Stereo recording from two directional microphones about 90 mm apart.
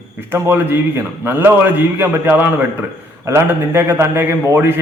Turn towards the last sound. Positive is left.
turn(degrees=-25)  # may be behind; listen again after turning